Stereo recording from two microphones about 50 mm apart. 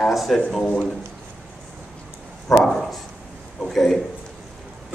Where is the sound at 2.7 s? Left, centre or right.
Centre.